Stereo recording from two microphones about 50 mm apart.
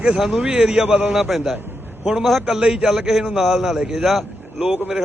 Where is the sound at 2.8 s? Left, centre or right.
Centre.